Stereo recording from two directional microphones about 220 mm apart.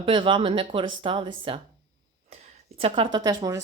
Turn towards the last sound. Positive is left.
turn(degrees=-15)  # may be behind; listen again after turning